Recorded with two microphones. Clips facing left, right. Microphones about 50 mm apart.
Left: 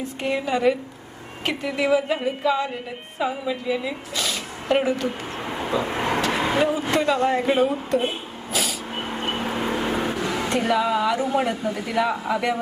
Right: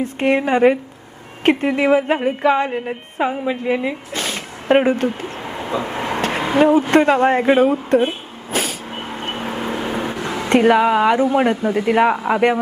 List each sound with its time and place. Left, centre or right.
0.0 s a woman's voice: right
5.4 s vehicle: centre
6.6 s a woman's voice: right
8.5 s vehicle: right
9.0 s vehicle: centre
9.3 s vehicle: centre
9.6 s vehicle: centre
10.6 s a woman's voice: right